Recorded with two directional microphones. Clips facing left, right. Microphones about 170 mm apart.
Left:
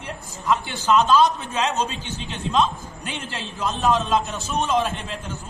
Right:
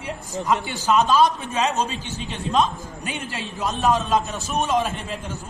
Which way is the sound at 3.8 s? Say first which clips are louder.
Even; 45° right (ahead or behind).